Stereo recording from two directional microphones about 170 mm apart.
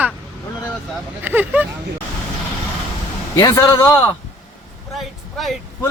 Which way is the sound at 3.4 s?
25° left (ahead or behind).